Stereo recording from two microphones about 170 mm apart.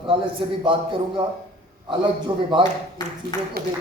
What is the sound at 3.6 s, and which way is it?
Speech, 65° right (ahead or behind).